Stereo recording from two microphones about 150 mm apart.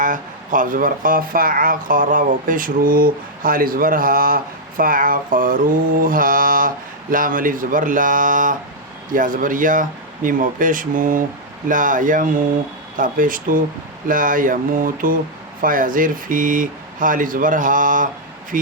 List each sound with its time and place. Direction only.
0.0 s speech: 60° right (ahead or behind)